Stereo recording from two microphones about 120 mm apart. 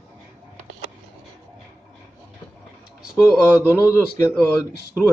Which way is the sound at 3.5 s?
25° left (ahead or behind).